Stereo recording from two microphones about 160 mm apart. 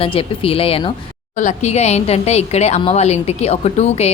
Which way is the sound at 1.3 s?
50° left (ahead or behind).